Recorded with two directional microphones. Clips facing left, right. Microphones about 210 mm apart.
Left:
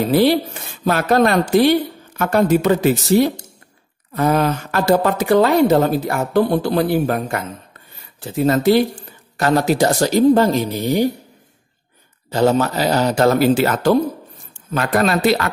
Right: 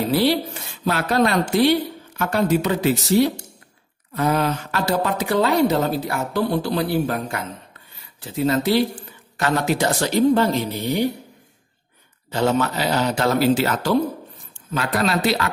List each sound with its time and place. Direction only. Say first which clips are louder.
0.1 s speech: left 5 dB; 50° left (ahead or behind)
9.4 s speech: left 5 dB; 40° left (ahead or behind)
12.3 s speech: left 4 dB; 40° left (ahead or behind)